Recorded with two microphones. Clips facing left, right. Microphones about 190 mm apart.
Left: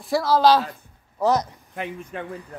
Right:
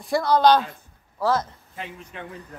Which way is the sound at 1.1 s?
20° left (ahead or behind).